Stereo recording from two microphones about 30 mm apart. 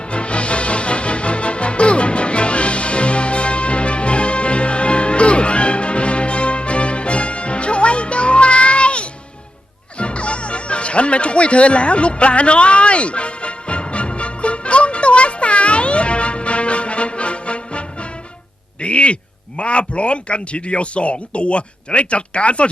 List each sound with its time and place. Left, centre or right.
0.1 s music: left
18.8 s a man's voice: left